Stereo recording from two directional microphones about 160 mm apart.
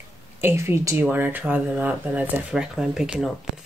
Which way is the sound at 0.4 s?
15° right (ahead or behind).